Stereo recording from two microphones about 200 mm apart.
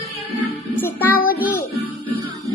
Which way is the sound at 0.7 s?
10° left (ahead or behind).